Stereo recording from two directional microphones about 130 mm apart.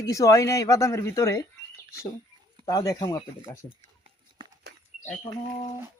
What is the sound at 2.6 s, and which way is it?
Speech, 30° left (ahead or behind).